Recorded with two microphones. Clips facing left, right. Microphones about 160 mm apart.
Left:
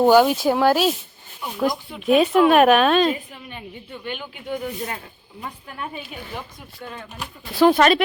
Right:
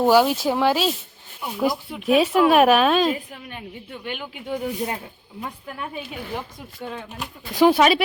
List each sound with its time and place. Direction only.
0.0 s speech: centre (ahead or behind)
6.8 s speech: 20° right (ahead or behind)